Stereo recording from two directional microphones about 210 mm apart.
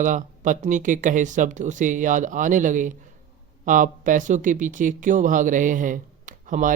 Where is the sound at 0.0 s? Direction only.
35° right (ahead or behind).